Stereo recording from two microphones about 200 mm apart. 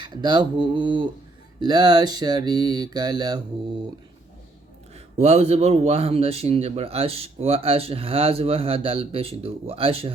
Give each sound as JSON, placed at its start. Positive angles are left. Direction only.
{"t": 0.0, "sound": "speech", "side_deg": -20}
{"t": 5.1, "sound": "speech", "side_deg": -35}